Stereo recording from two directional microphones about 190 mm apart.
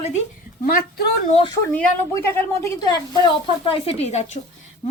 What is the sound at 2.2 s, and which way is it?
A woman's voice, 10° left (ahead or behind).